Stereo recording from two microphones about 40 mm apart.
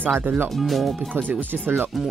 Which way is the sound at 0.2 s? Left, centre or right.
Right.